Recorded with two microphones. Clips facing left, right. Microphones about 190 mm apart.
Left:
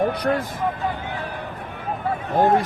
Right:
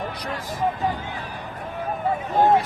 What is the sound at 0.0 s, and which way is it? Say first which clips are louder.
Speech: left 10 dB; 55° left (ahead or behind).